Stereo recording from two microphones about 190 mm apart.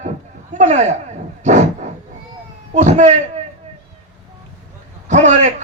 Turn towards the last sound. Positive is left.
turn(degrees=-40)  # may be behind; listen again after turning